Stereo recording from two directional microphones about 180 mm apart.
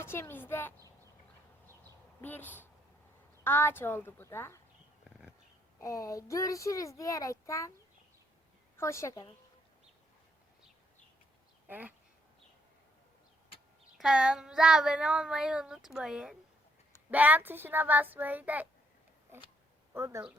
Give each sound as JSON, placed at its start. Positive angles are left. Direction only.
{"t": 0.0, "sound": "a child's voice", "side_deg": 15}
{"t": 2.2, "sound": "a child's voice", "side_deg": 10}
{"t": 5.8, "sound": "a child's voice", "side_deg": 20}
{"t": 8.8, "sound": "a child's voice", "side_deg": 15}
{"t": 11.7, "sound": "a child's voice", "side_deg": -10}
{"t": 14.0, "sound": "child singing", "side_deg": -5}
{"t": 17.1, "sound": "a child's voice", "side_deg": -10}
{"t": 19.9, "sound": "speech", "side_deg": -15}